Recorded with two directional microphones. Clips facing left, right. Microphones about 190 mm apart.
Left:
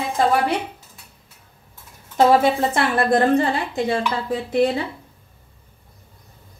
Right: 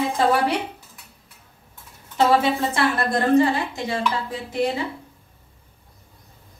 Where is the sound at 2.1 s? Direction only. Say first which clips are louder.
Left 3 dB; 50° left (ahead or behind).